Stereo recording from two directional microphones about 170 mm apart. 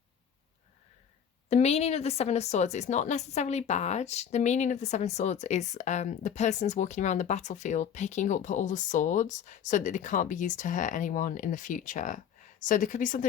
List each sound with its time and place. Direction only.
1.5 s speech: 40° left (ahead or behind)